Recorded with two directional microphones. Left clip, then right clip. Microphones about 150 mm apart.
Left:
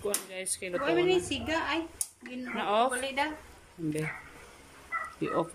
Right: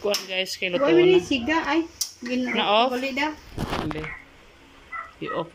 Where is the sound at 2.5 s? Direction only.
Centre (ahead or behind).